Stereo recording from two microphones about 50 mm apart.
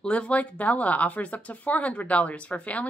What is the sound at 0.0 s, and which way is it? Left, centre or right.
Speech, left.